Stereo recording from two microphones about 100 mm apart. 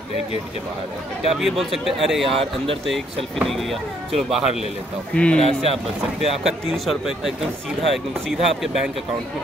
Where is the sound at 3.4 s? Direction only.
Centre (ahead or behind).